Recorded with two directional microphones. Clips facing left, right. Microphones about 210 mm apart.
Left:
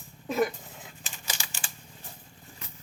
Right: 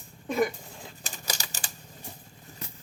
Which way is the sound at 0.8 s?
40° right (ahead or behind).